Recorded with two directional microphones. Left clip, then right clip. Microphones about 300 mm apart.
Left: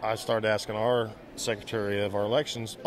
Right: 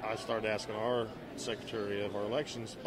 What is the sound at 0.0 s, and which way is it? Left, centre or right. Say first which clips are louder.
A man's voice: left 8 dB; left.